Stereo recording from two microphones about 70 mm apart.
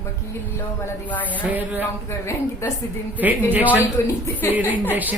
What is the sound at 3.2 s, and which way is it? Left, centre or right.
Speech, right.